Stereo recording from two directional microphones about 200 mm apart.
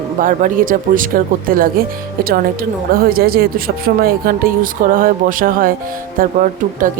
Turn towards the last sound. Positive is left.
turn(degrees=-40)  # may be behind; listen again after turning